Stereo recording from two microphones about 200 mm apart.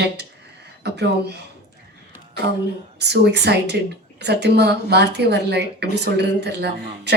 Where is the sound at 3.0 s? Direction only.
55° right (ahead or behind).